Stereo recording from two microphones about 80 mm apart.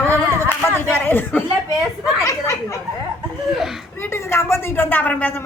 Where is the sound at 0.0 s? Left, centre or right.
Left.